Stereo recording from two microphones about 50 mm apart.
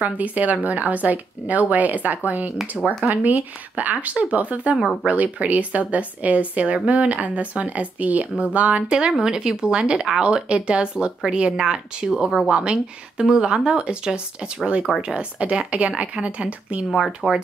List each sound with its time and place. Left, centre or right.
0.0 s speech: right
2.8 s speech: centre
3.3 s speech: right
16.9 s speech: centre